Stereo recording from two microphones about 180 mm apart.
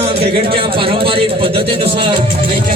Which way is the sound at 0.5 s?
30° right (ahead or behind).